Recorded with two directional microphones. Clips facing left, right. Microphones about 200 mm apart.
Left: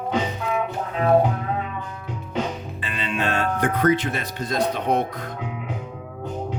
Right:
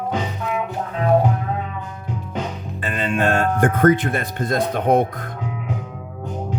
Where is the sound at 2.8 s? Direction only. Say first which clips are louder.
Right 6 dB; 50° right (ahead or behind).